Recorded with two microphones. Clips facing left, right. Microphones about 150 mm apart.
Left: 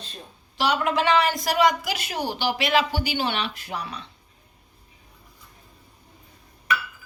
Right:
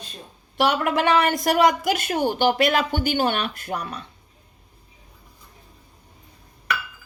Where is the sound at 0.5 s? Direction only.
50° right (ahead or behind).